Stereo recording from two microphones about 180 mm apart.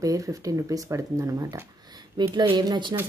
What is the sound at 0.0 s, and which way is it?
Speech, 20° right (ahead or behind).